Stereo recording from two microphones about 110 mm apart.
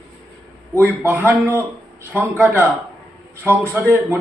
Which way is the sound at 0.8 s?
20° right (ahead or behind).